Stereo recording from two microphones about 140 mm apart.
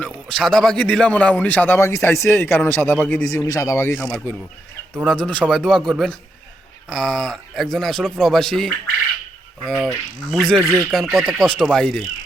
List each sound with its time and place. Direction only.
0.0 s a man's voice: 5° left (ahead or behind)
3.3 s speech: 25° left (ahead or behind); by 5.9 s centre (ahead or behind)
6.9 s speech: 5° left (ahead or behind)